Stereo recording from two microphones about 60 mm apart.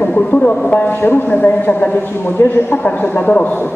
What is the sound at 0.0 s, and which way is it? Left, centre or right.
Speech, left.